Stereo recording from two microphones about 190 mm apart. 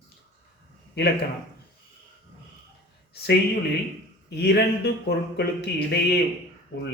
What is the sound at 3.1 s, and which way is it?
Speech, 55° left (ahead or behind).